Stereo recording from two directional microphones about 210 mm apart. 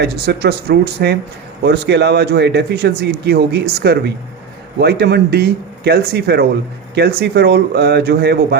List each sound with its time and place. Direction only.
0.0 s speech: 50° right (ahead or behind)